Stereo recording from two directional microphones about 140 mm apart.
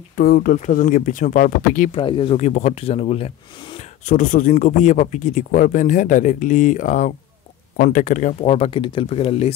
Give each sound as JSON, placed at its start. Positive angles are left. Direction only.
{"t": 0.1, "sound": "speech", "side_deg": 90}
{"t": 1.9, "sound": "speech", "side_deg": 35}
{"t": 2.3, "sound": "speech", "side_deg": 55}
{"t": 4.1, "sound": "a man's voice", "side_deg": 70}